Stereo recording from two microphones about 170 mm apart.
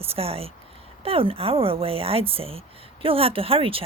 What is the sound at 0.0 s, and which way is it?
Speech, 35° right (ahead or behind).